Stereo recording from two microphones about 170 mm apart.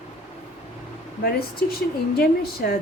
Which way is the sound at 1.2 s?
60° left (ahead or behind).